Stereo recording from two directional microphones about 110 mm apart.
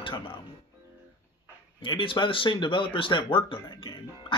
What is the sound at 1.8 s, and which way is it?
Speech, 50° left (ahead or behind).